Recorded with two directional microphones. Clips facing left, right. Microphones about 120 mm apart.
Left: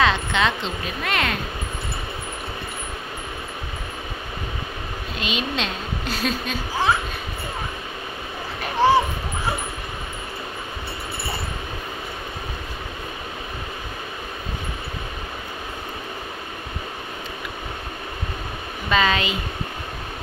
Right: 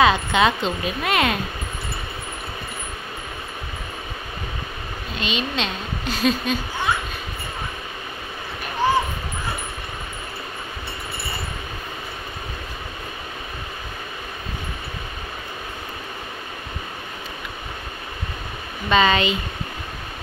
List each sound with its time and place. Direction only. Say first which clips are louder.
0.0 s speech: right 3 dB; 10° right (ahead or behind)
5.2 s a woman's voice: right 1 dB; 5° left (ahead or behind)
8.8 s crow: left 4 dB; 90° left
18.9 s a woman's voice: right 3 dB; centre (ahead or behind)